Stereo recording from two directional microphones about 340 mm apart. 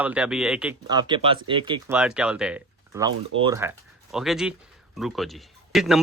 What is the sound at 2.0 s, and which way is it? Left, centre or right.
Speech, centre.